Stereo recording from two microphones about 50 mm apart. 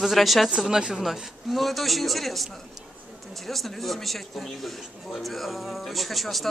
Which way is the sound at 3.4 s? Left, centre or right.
Centre.